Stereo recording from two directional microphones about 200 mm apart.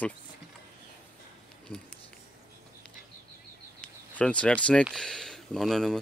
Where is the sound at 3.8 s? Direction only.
5° left (ahead or behind).